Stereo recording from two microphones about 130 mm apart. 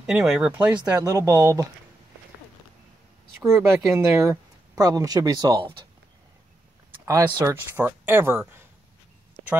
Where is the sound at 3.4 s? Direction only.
20° right (ahead or behind).